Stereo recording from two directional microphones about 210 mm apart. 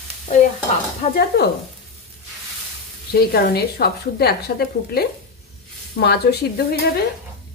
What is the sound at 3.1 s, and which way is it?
Speech, 50° left (ahead or behind).